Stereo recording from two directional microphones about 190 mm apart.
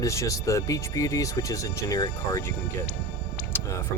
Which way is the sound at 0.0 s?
15° left (ahead or behind).